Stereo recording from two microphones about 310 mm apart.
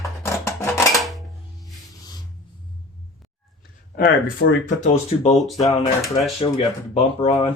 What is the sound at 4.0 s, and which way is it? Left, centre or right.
Speech, left.